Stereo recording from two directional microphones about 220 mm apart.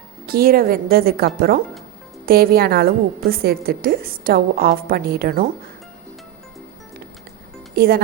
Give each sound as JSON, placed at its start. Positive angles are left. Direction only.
{"t": 0.3, "sound": "a woman's voice", "side_deg": -40}
{"t": 7.8, "sound": "a woman's voice", "side_deg": -45}